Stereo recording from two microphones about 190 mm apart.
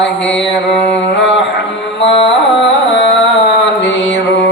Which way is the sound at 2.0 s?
30° left (ahead or behind).